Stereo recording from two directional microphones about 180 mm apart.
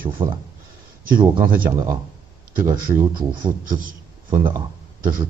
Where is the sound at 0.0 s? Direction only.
25° right (ahead or behind).